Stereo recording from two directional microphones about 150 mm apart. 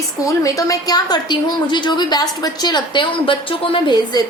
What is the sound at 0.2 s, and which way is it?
A woman's voice, 20° left (ahead or behind).